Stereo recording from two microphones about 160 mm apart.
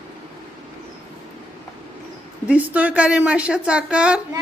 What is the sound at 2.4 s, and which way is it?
A woman's voice, 10° right (ahead or behind).